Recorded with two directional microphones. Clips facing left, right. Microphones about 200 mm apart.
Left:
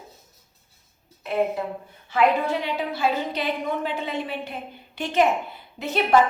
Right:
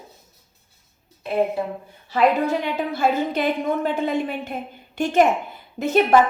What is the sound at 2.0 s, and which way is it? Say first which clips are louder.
A woman's voice: right 2 dB; 40° right (ahead or behind).